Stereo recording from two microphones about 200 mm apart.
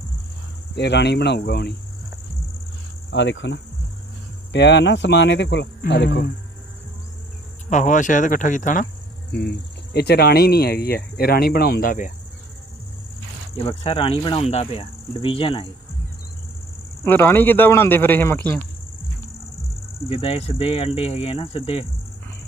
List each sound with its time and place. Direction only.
0.8 s speech: 55° left (ahead or behind)
3.1 s speech: 65° left (ahead or behind)
7.7 s speech: 40° left (ahead or behind)
9.9 s speech: 55° left (ahead or behind)
13.6 s speech: 30° left (ahead or behind)
17.0 s speech: 10° left (ahead or behind)
20.1 s speech: 30° left (ahead or behind)